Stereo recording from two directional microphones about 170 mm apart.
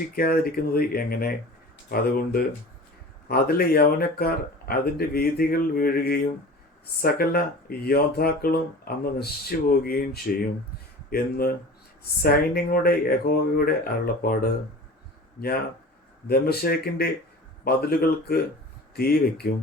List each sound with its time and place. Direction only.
0.2 s speech: 60° left (ahead or behind)
16.3 s speech: 65° left (ahead or behind)